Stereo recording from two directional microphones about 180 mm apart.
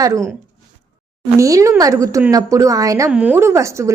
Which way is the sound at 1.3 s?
15° right (ahead or behind).